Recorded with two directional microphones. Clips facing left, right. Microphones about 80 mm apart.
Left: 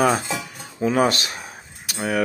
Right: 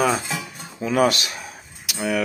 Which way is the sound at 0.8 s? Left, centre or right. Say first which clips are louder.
Even; left.